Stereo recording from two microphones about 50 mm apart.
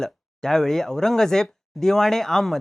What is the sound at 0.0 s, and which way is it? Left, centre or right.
Speech, centre.